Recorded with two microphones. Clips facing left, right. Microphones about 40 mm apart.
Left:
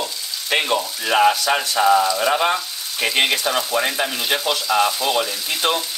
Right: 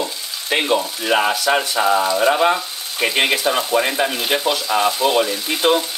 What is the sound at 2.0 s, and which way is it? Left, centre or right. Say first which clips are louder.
Speech: right 2 dB; right.